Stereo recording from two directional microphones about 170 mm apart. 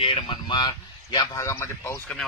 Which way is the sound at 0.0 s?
30° left (ahead or behind).